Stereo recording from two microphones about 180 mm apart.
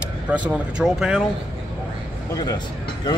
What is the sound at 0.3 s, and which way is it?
Speech, 5° right (ahead or behind).